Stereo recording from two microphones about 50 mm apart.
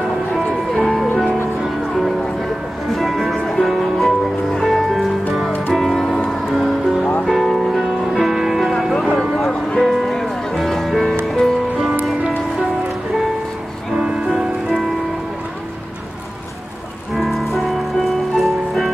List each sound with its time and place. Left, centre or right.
0.3 s music: centre
1.1 s music: centre
13.9 s music: centre
14.2 s music: centre
17.1 s music: centre